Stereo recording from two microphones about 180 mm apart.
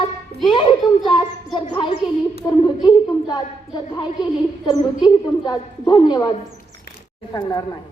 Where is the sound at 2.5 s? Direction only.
20° left (ahead or behind).